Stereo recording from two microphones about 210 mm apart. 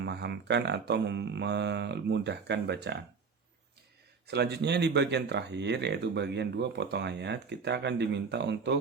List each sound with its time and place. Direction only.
0.0 s speech: 55° right (ahead or behind)
4.3 s speech: 55° right (ahead or behind)